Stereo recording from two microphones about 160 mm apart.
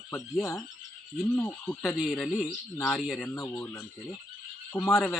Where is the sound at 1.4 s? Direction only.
10° left (ahead or behind).